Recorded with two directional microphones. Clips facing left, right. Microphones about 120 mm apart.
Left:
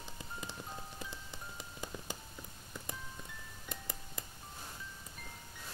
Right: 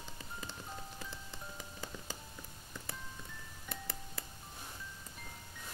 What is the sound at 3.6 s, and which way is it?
Music, 15° left (ahead or behind).